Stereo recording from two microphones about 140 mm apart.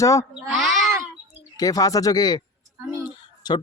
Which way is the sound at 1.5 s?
25° left (ahead or behind).